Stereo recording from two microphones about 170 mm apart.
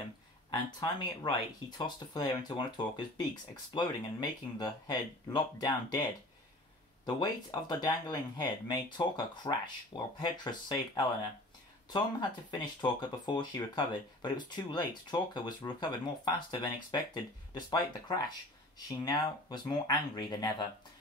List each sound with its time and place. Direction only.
0.7 s speech: 25° left (ahead or behind)
3.7 s speech: 25° left (ahead or behind)
7.1 s speech: 25° left (ahead or behind)